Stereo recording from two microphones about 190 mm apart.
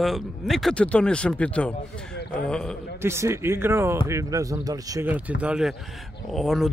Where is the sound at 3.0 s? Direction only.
15° right (ahead or behind).